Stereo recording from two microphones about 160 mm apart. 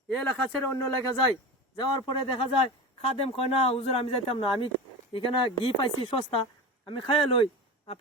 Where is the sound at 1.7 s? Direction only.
25° left (ahead or behind).